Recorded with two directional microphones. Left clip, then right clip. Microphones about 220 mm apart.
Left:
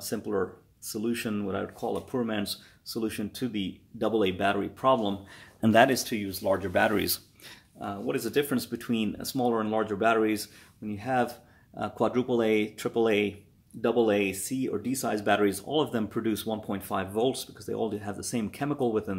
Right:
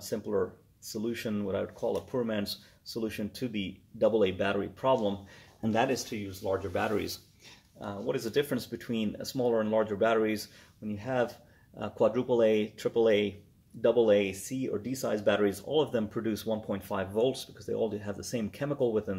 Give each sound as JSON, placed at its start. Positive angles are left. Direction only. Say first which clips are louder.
{"t": 0.0, "sound": "speech", "louder": "left 1 dB", "side_deg": 15}
{"t": 5.6, "sound": "speech", "louder": "left 7 dB", "side_deg": 35}
{"t": 7.8, "sound": "speech", "louder": "left 2 dB", "side_deg": 15}